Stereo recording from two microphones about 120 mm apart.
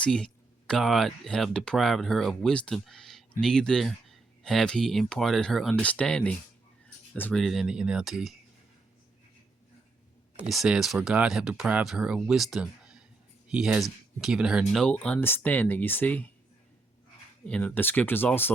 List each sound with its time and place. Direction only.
0.0 s speech: 10° left (ahead or behind)
7.3 s speech: centre (ahead or behind)
10.5 s speech: centre (ahead or behind)
14.8 s speech: 10° left (ahead or behind)
17.4 s speech: 10° left (ahead or behind)